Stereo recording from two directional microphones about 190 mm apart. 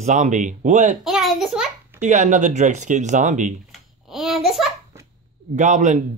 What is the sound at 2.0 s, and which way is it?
Speech, 40° right (ahead or behind).